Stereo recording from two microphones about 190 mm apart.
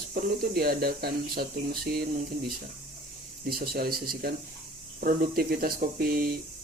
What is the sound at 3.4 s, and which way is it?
Speech, 55° right (ahead or behind).